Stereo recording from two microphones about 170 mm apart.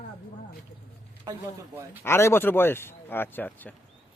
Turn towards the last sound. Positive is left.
turn(degrees=10)  # may be behind; listen again after turning